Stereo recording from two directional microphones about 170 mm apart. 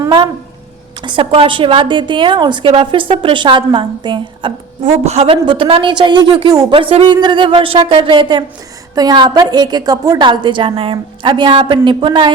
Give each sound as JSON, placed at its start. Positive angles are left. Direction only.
{"t": 0.0, "sound": "a sound", "side_deg": -25}
{"t": 1.0, "sound": "a woman's voice", "side_deg": -30}
{"t": 4.8, "sound": "a woman's voice", "side_deg": -40}